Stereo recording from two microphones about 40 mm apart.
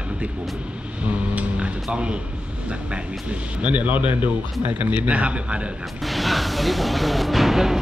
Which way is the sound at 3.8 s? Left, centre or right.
Right.